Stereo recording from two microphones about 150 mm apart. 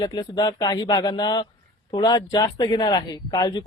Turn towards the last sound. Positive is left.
turn(degrees=25)  # may be behind; listen again after turning